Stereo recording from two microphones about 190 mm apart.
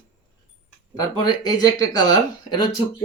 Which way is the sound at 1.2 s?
20° left (ahead or behind).